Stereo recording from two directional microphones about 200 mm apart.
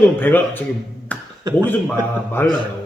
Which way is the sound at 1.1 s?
5° left (ahead or behind).